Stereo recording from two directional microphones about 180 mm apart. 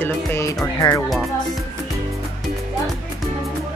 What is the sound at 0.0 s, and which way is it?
Music, 15° left (ahead or behind).